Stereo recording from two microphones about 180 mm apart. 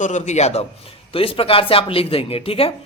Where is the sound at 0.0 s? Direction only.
40° left (ahead or behind).